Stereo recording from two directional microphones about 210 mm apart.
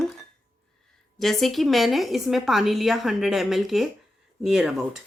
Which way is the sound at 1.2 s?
Centre (ahead or behind).